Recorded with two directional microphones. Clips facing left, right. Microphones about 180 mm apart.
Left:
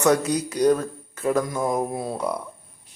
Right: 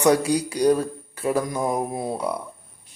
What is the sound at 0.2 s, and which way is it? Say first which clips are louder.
Mantra: even; 10° right (ahead or behind).